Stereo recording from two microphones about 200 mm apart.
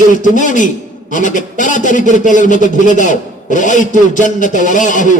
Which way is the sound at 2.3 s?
40° left (ahead or behind).